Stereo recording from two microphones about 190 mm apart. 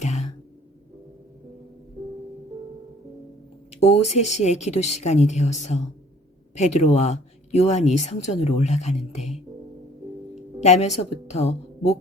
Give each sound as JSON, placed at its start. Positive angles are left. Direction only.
{"t": 0.0, "sound": "cough", "side_deg": 35}
{"t": 3.7, "sound": "speech", "side_deg": 35}
{"t": 10.3, "sound": "a woman's voice", "side_deg": 35}